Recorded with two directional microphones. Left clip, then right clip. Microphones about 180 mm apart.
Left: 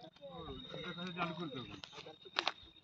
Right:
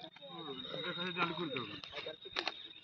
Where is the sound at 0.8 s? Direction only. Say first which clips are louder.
Right 6 dB; 35° left (ahead or behind).